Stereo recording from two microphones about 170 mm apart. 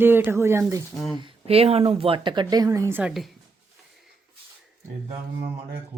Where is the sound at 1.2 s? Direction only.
35° right (ahead or behind); by 3.1 s 10° right (ahead or behind).